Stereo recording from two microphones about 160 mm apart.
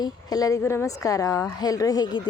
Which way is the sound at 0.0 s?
25° left (ahead or behind).